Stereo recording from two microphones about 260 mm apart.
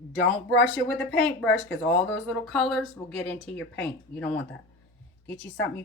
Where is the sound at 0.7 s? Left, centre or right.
Centre.